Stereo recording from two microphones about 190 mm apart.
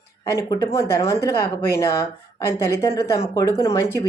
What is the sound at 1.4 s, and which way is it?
Speech, 55° left (ahead or behind).